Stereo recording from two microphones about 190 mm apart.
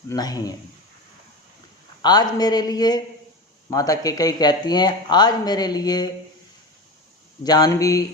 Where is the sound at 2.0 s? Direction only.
20° left (ahead or behind).